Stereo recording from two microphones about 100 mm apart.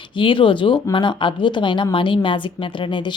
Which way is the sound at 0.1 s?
60° left (ahead or behind).